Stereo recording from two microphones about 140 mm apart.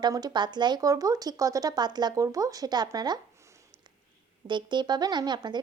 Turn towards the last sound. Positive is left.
turn(degrees=-30)  # may be behind; listen again after turning